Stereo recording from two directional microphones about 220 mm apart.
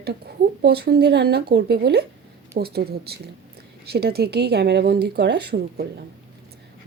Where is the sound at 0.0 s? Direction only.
45° right (ahead or behind).